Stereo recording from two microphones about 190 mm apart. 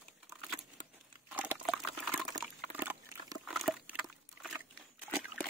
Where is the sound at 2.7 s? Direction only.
10° right (ahead or behind).